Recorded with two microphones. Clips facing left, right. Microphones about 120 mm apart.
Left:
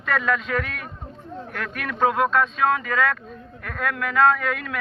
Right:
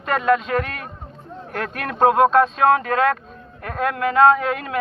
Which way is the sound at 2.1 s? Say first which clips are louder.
Right 6 dB; 30° right (ahead or behind).